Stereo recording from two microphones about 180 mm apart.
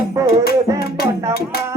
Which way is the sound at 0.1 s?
15° right (ahead or behind).